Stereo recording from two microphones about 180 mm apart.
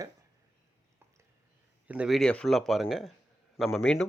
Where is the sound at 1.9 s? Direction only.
5° right (ahead or behind).